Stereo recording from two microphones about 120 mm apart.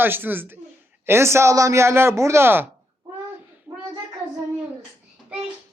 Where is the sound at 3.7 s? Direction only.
20° right (ahead or behind).